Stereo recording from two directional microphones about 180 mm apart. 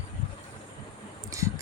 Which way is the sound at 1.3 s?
20° right (ahead or behind).